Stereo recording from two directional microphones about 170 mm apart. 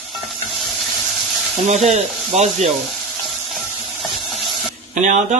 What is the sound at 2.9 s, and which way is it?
Stir, centre (ahead or behind).